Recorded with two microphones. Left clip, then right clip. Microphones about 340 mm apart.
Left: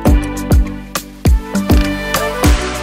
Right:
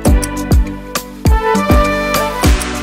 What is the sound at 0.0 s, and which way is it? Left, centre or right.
Music, centre.